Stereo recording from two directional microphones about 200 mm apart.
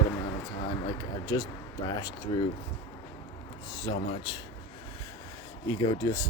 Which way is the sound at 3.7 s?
20° left (ahead or behind).